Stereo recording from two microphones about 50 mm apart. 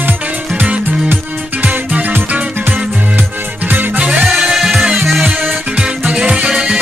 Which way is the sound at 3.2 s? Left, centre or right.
Right.